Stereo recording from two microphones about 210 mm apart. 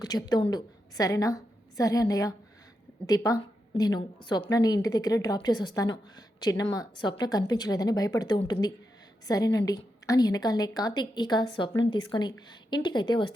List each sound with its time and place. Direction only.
0.0 s a woman's voice: 20° left (ahead or behind)